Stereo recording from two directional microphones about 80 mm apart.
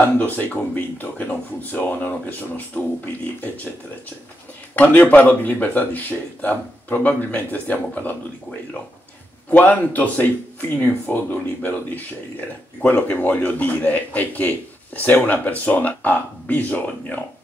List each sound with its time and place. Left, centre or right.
0.2 s speech: left
4.7 s speech: left
9.5 s speech: centre